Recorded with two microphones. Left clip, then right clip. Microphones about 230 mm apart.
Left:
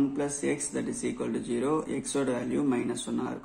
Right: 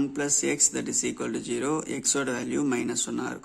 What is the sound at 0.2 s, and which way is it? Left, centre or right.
Speech, right.